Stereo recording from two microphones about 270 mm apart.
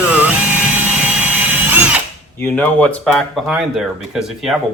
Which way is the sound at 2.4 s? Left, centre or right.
Centre.